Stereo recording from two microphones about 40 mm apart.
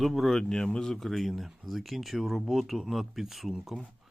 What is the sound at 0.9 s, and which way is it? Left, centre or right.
Speech, centre.